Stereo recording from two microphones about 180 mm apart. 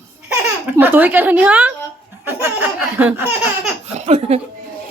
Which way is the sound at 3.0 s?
10° right (ahead or behind).